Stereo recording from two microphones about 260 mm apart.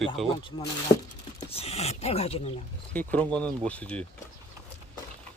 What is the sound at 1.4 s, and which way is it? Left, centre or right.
Speech, left.